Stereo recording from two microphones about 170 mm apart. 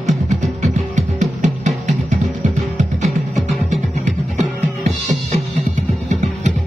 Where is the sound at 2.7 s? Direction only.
45° right (ahead or behind).